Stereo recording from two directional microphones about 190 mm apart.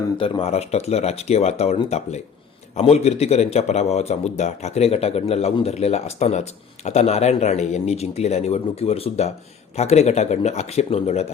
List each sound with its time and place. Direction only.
0.2 s speech: 30° left (ahead or behind)